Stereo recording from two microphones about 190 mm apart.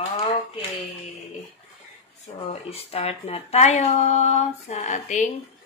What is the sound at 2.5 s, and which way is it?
Speech, 30° left (ahead or behind).